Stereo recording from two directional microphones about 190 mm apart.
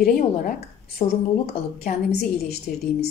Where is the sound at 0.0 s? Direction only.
50° left (ahead or behind).